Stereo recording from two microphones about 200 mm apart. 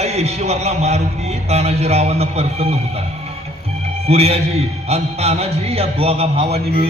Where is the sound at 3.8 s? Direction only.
30° right (ahead or behind).